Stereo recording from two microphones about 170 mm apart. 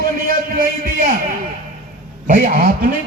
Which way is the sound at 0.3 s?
55° right (ahead or behind).